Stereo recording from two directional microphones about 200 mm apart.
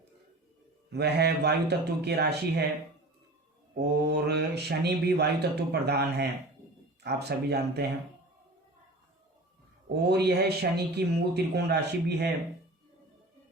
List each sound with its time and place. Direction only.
0.9 s speech: 55° right (ahead or behind)
3.8 s speech: 55° right (ahead or behind)
9.9 s speech: 55° right (ahead or behind)